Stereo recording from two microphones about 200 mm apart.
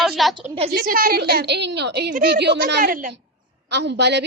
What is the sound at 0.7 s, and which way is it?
A woman's voice, 50° right (ahead or behind).